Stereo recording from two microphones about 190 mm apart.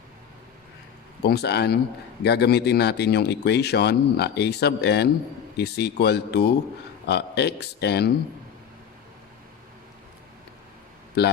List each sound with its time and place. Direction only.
1.2 s speech: 60° left (ahead or behind)
11.2 s speech: 60° left (ahead or behind)